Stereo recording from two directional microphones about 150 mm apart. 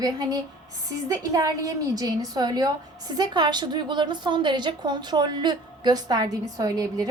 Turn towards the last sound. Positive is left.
turn(degrees=-25)  # may be behind; listen again after turning